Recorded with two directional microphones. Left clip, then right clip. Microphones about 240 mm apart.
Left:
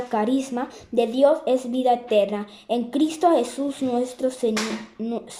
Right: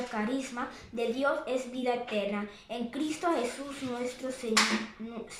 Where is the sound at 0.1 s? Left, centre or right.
Left.